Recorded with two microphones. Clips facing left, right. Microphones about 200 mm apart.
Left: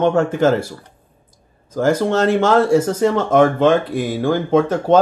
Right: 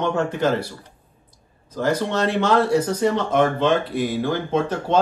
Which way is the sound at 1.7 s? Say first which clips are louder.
Left 6 dB; 45° left (ahead or behind).